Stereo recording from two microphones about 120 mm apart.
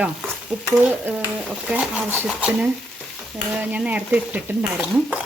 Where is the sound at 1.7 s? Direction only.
15° right (ahead or behind).